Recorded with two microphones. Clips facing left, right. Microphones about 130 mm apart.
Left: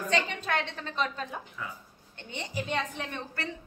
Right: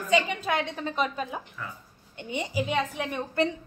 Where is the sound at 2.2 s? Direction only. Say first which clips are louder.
Right 7 dB; 10° right (ahead or behind).